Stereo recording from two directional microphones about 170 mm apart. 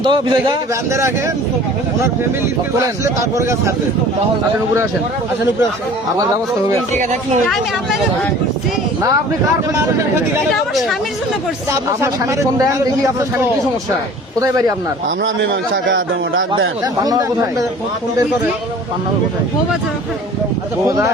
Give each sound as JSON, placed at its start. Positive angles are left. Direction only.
{"t": 0.0, "sound": "speech", "side_deg": -30}
{"t": 0.9, "sound": "speech", "side_deg": -15}
{"t": 2.8, "sound": "speech", "side_deg": -20}
{"t": 6.9, "sound": "speech", "side_deg": -45}
{"t": 12.0, "sound": "speech", "side_deg": -15}
{"t": 14.3, "sound": "speech", "side_deg": -20}
{"t": 15.2, "sound": "a man's voice", "side_deg": -90}
{"t": 16.5, "sound": "speech", "side_deg": -25}